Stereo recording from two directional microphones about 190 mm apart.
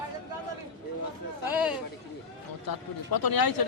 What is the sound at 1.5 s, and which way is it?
Speech, 5° right (ahead or behind).